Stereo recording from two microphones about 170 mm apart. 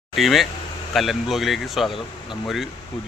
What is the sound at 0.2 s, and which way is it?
Speech, centre (ahead or behind).